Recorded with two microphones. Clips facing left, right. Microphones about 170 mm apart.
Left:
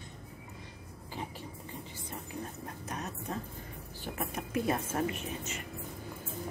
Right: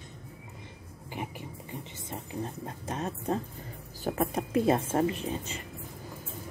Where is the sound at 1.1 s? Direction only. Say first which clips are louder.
Right 3 dB; 15° right (ahead or behind).